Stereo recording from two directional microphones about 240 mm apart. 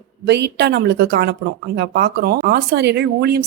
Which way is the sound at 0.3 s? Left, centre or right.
Right.